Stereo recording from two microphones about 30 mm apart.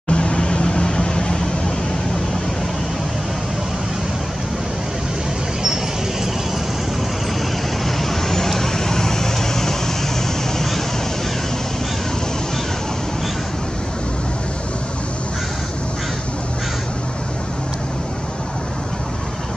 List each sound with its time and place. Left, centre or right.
0.1 s vehicle: left
7.8 s vehicle: centre